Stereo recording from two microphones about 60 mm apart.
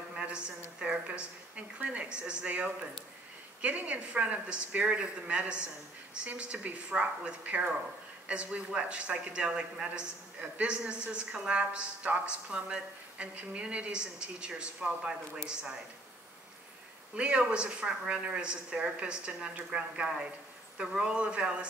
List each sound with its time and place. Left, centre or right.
0.1 s a woman's voice: centre
17.1 s a man's voice: centre